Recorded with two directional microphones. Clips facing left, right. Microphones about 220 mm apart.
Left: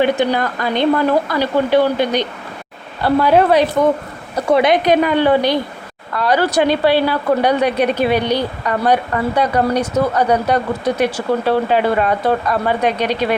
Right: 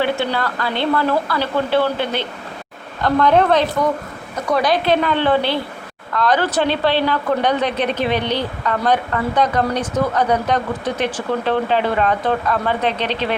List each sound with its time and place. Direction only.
0.0 s a woman's voice: 15° left (ahead or behind)
4.4 s a woman's voice: 25° left (ahead or behind)